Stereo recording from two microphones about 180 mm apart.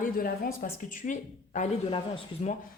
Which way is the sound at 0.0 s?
50° left (ahead or behind).